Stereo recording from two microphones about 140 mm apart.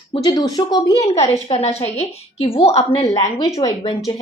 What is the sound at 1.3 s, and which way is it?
A woman's voice, 45° left (ahead or behind).